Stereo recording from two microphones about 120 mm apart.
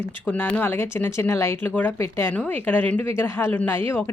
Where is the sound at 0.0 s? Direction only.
15° left (ahead or behind).